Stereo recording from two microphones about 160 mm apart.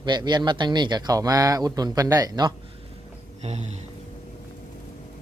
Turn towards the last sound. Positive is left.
turn(degrees=-45)  # may be behind; listen again after turning